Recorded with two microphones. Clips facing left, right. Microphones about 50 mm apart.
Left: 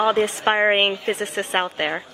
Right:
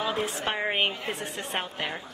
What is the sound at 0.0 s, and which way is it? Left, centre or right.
A woman's voice, left.